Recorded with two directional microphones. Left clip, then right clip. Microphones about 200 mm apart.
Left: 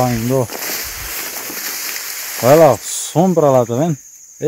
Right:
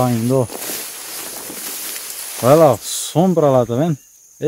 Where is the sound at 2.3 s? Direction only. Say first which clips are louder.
Left 2 dB; 5° left (ahead or behind).